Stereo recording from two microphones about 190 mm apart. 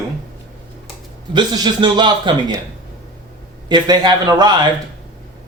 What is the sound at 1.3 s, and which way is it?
A man's voice, 20° right (ahead or behind).